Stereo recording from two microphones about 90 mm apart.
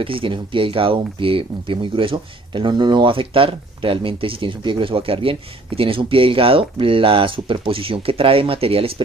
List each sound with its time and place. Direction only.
0.0 s speech: 80° right